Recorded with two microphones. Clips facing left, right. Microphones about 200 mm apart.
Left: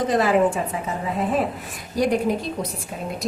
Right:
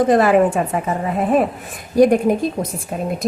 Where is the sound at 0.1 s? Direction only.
55° right (ahead or behind).